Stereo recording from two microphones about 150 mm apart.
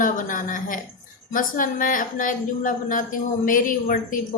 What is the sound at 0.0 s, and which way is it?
A woman's voice, 60° left (ahead or behind).